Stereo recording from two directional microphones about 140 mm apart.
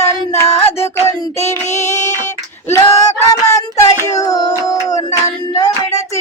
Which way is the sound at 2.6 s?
20° left (ahead or behind).